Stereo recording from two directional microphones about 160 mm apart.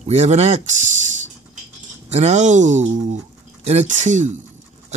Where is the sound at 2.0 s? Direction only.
45° right (ahead or behind).